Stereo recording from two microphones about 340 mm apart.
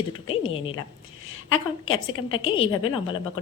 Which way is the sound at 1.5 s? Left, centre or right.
Left.